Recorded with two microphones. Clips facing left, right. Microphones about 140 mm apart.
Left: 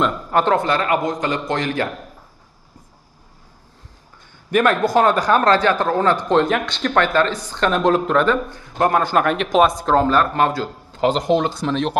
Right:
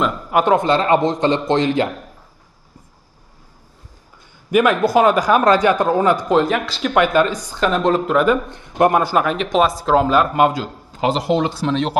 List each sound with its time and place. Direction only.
0.0 s a man's voice: 10° right (ahead or behind)
4.5 s a man's voice: 5° right (ahead or behind)
8.5 s speech: 20° right (ahead or behind); by 12.0 s centre (ahead or behind)